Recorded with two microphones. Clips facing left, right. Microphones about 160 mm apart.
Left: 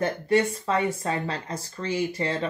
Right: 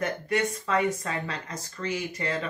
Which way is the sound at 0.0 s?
30° left (ahead or behind).